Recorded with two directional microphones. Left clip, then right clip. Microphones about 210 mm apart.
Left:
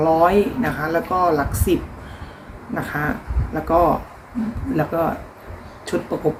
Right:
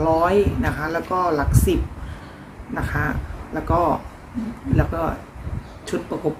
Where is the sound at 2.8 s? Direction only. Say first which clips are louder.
Left 1 dB; centre (ahead or behind).